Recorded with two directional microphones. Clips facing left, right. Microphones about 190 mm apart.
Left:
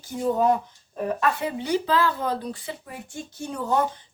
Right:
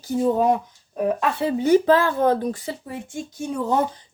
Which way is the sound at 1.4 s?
45° right (ahead or behind).